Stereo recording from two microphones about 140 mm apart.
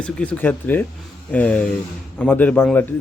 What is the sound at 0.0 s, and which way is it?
Speech, 10° left (ahead or behind).